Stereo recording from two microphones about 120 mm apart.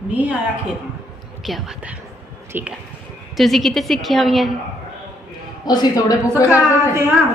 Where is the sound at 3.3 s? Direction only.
Centre (ahead or behind).